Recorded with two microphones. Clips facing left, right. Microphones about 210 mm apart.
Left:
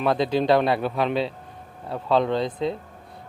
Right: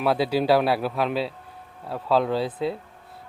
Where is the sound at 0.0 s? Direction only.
5° right (ahead or behind).